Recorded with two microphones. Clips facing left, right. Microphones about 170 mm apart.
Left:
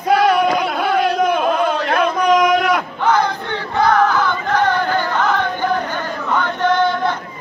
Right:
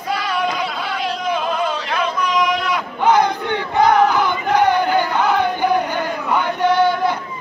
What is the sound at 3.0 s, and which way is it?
Battle cry, 15° right (ahead or behind).